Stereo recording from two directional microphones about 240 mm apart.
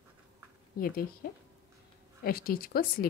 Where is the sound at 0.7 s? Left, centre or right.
Left.